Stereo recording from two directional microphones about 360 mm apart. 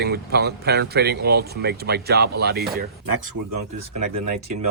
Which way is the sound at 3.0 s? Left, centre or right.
Right.